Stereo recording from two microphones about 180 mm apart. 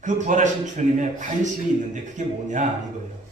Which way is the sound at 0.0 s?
45° right (ahead or behind).